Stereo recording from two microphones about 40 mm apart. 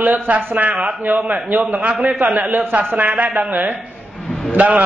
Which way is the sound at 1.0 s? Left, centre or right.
Right.